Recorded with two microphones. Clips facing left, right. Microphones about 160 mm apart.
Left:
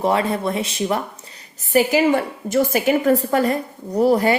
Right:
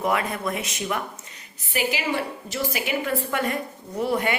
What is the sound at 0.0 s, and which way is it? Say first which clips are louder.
A woman's voice: left 6 dB; 30° left (ahead or behind).